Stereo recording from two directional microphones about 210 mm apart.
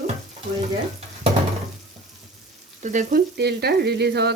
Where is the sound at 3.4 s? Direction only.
50° right (ahead or behind).